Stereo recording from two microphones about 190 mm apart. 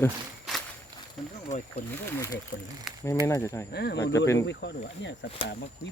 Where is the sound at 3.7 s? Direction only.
60° left (ahead or behind).